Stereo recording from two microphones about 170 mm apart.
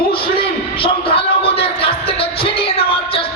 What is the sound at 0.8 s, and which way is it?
Music, 30° left (ahead or behind).